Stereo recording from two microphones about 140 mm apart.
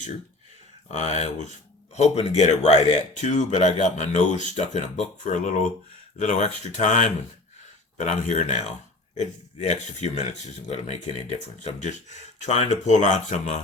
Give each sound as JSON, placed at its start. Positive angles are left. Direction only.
{"t": 0.9, "sound": "speech", "side_deg": 55}